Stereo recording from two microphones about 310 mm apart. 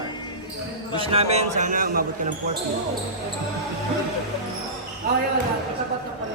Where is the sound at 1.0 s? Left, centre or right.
Centre.